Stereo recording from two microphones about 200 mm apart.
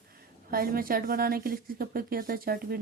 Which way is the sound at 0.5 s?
45° right (ahead or behind).